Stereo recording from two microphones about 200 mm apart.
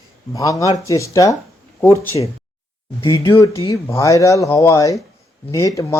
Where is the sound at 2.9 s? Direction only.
25° left (ahead or behind).